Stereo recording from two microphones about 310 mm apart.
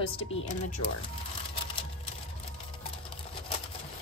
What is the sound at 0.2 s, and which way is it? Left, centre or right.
Speech, centre.